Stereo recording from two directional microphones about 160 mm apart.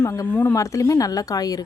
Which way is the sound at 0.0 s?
15° left (ahead or behind).